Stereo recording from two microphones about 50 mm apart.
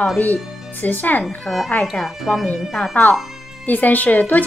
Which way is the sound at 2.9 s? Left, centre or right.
Left.